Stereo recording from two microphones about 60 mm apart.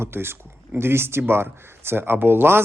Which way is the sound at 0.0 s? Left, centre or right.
Right.